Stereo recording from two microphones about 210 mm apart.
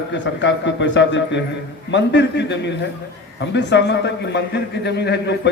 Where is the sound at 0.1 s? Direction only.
60° left (ahead or behind).